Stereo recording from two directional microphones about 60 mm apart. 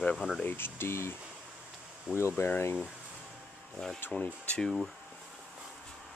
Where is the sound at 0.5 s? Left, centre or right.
Left.